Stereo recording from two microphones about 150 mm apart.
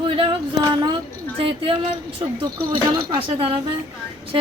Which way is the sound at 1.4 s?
35° right (ahead or behind).